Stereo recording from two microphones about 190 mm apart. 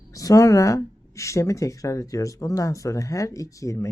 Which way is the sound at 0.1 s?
15° left (ahead or behind).